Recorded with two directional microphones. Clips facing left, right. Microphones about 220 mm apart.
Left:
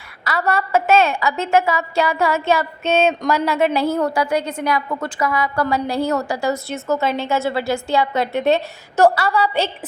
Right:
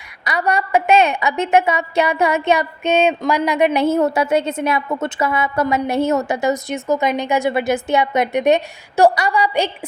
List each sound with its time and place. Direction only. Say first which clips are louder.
0.3 s a woman's voice: right 1 dB; 15° right (ahead or behind)